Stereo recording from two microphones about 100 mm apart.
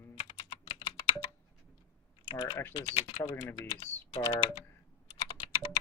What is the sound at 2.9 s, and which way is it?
Speech, 90° left.